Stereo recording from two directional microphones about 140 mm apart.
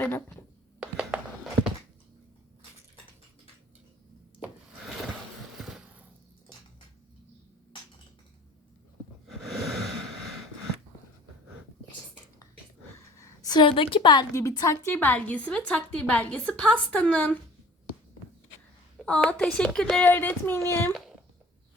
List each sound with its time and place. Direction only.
0.0 s a woman's voice: 10° left (ahead or behind)
0.8 s mechanisms: 10° right (ahead or behind)
5.5 s a sound: 5° right (ahead or behind)
9.2 s wheeze: centre (ahead or behind)
13.1 s a woman's voice: 25° left (ahead or behind)
14.3 s a woman's voice: 25° left (ahead or behind)
18.9 s a woman's voice: 10° left (ahead or behind)